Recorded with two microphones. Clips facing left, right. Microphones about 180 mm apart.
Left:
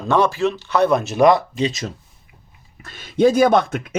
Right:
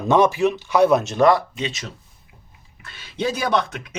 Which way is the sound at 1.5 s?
40° left (ahead or behind).